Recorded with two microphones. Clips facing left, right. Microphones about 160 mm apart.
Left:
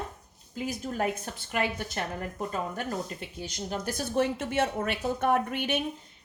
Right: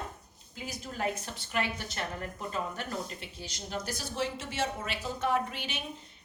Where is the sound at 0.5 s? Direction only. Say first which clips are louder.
Left 7 dB; 50° left (ahead or behind).